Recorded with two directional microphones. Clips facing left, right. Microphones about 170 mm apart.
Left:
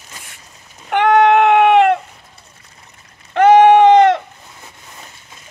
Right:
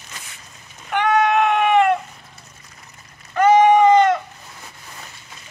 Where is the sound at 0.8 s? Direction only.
60° left (ahead or behind).